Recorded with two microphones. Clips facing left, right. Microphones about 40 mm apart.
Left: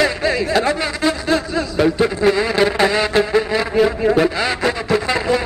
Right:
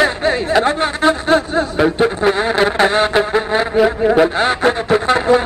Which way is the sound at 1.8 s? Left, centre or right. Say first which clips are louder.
Even; right.